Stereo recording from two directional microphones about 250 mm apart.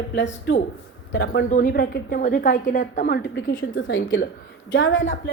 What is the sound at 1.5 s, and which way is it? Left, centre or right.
A woman's voice, left.